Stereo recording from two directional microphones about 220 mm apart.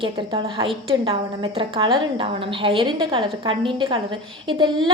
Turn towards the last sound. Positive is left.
turn(degrees=-20)  # may be behind; listen again after turning